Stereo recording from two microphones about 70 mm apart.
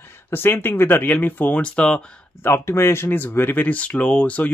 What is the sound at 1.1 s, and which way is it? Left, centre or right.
Speech, left.